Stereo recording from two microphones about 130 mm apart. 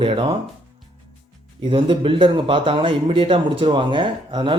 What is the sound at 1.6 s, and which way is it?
Speech, 40° right (ahead or behind).